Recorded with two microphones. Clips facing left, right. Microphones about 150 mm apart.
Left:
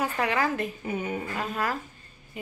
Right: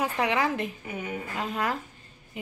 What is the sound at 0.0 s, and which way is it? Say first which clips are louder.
A woman's voice: even; 15° right (ahead or behind).